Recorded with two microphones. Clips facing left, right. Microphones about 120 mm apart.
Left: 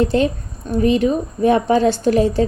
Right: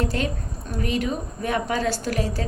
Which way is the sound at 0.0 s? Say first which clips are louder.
Left 9 dB; 25° left (ahead or behind).